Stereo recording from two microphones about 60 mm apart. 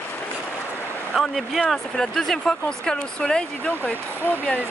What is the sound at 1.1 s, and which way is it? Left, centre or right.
Speech, centre.